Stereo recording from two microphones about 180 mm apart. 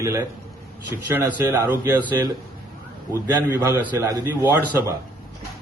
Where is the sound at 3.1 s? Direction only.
15° right (ahead or behind).